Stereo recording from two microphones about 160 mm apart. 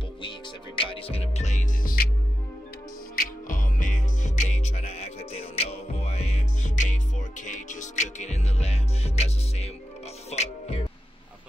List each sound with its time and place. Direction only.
0.7 s music: 35° left (ahead or behind); by 2.0 s 60° left (ahead or behind)
3.2 s music: 55° left (ahead or behind)